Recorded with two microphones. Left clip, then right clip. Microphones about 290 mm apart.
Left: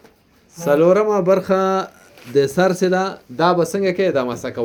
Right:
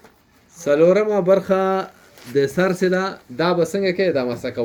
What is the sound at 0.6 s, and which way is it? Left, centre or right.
Speech, centre.